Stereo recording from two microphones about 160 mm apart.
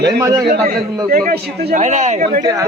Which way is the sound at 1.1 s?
60° right (ahead or behind).